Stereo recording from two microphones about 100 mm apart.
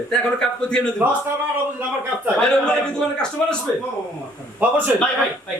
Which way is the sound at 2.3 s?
5° left (ahead or behind).